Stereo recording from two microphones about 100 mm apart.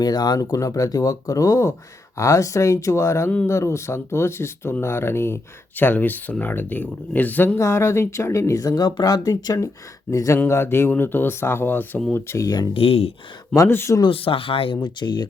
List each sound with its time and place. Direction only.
0.0 s speech: 45° left (ahead or behind); by 12.5 s 25° left (ahead or behind)
12.7 s speech: 75° left (ahead or behind)
13.6 s speech: 25° left (ahead or behind)
14.0 s speech: 65° left (ahead or behind)
14.8 s speech: 45° left (ahead or behind)